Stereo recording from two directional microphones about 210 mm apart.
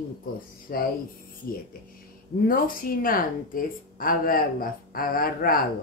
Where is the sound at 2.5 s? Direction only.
40° left (ahead or behind).